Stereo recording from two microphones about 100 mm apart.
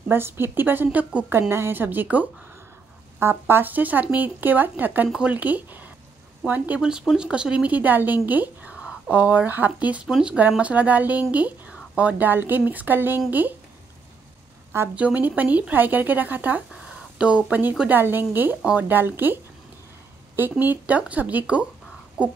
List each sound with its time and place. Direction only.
0.1 s speech: 20° right (ahead or behind)
10.0 s speech: 5° right (ahead or behind)
10.6 s speech: 15° right (ahead or behind)
14.7 s a woman's voice: 25° right (ahead or behind)
20.3 s speech: 20° right (ahead or behind)